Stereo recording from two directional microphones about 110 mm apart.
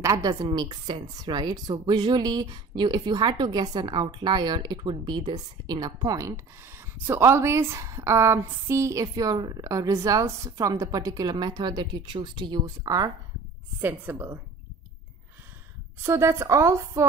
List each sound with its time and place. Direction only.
0.0 s a woman's voice: 35° right (ahead or behind)
13.7 s a woman's voice: 20° right (ahead or behind)
16.0 s a woman's voice: 25° right (ahead or behind)